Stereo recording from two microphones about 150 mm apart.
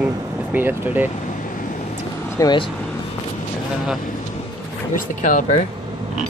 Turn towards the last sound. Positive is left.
turn(degrees=55)  # may be behind; listen again after turning